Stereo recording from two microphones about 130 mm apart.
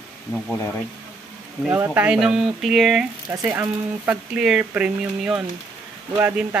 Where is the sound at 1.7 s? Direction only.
20° right (ahead or behind).